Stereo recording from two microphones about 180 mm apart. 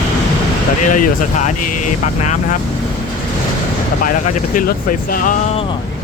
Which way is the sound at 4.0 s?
50° left (ahead or behind).